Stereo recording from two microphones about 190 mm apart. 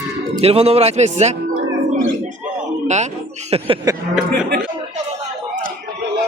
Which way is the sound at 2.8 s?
40° right (ahead or behind).